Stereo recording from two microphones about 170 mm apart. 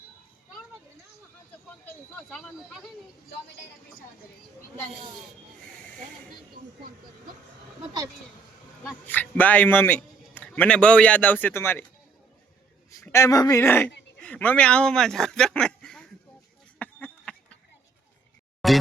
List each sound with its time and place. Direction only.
1.9 s speech: 5° left (ahead or behind)
9.0 s a man's voice: 10° left (ahead or behind)
12.9 s a man's voice: 20° left (ahead or behind)
16.7 s a sound: 5° left (ahead or behind)
18.6 s music: centre (ahead or behind)